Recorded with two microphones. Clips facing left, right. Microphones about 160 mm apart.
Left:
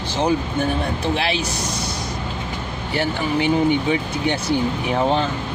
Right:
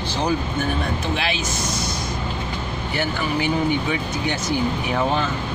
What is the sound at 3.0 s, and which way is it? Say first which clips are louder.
Speech: left 3 dB; 25° left (ahead or behind).